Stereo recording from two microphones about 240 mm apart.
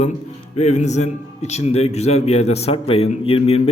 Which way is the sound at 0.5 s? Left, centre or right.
Left.